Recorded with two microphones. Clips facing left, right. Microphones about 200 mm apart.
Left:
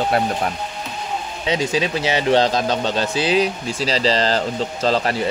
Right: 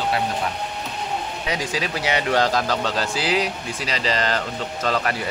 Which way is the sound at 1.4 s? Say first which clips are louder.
Left 8 dB; 25° left (ahead or behind).